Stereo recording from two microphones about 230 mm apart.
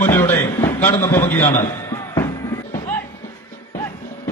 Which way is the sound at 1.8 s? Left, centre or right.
Centre.